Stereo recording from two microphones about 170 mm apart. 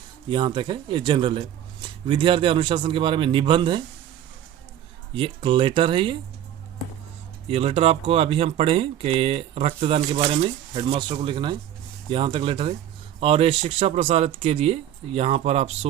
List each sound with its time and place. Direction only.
0.3 s speech: 30° right (ahead or behind)
5.1 s speech: 30° right (ahead or behind)
7.5 s speech: 35° right (ahead or behind)